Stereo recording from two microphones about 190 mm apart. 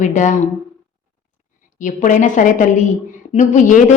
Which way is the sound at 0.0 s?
40° left (ahead or behind).